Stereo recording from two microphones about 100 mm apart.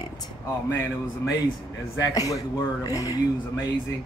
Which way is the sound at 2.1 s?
35° left (ahead or behind).